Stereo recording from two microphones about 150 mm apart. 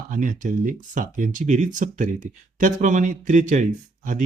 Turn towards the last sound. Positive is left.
turn(degrees=-55)  # may be behind; listen again after turning